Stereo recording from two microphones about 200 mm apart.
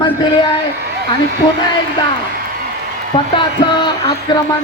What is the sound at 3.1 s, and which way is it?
Speech, 25° left (ahead or behind).